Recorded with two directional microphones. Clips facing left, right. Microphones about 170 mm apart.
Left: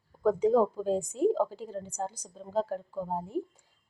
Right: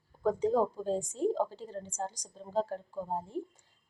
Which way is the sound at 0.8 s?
10° left (ahead or behind).